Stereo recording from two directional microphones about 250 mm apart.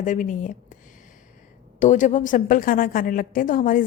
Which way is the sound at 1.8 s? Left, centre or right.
Left.